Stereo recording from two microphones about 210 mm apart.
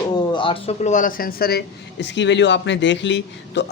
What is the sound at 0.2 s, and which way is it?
Speech, 25° left (ahead or behind).